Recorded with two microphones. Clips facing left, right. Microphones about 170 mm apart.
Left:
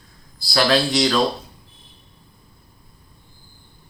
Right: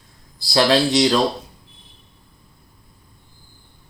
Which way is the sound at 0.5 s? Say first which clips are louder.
Right 2 dB; 25° right (ahead or behind).